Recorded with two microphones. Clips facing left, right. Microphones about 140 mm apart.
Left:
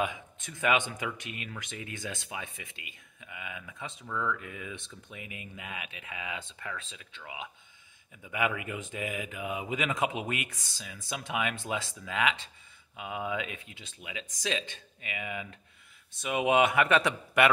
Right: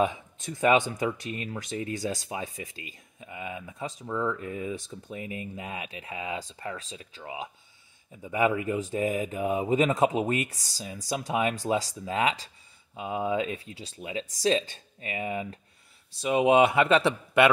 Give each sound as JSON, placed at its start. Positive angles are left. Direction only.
{"t": 0.0, "sound": "speech", "side_deg": -35}